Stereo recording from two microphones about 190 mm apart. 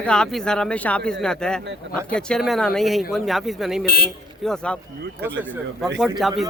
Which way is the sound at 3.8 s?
55° left (ahead or behind).